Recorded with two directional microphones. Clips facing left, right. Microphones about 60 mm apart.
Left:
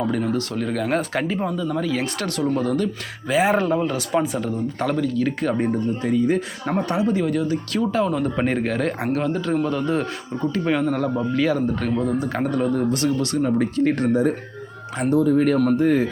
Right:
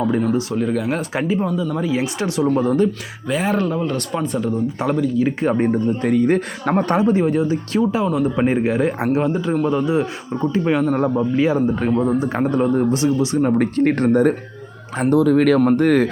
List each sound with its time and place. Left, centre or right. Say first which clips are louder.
0.0 s speech: right 4 dB; right
3.4 s speech: left 1 dB; centre
3.8 s speech: left 1 dB; centre
5.2 s a man's voice: right 4 dB; right
6.0 s speech: right 3 dB; right
7.9 s a man's voice: right 3 dB; centre; by 12.8 s right
12.9 s a man's voice: right 4 dB; centre
13.4 s speech: right 2 dB; right
15.1 s speech: right 3 dB; right